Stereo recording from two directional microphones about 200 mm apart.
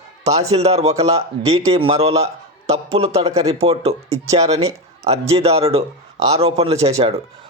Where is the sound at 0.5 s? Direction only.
30° right (ahead or behind).